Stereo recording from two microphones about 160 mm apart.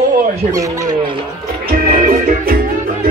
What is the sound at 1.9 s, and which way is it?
Music, 60° right (ahead or behind).